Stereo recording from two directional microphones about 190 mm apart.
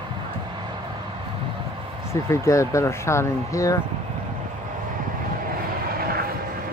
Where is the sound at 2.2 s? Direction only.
15° left (ahead or behind).